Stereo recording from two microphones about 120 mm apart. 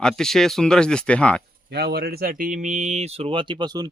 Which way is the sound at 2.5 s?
90° right.